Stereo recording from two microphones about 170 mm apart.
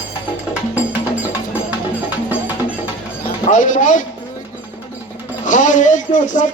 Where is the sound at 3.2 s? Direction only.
50° left (ahead or behind).